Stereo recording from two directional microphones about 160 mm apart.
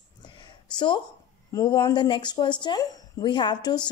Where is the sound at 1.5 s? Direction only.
25° left (ahead or behind).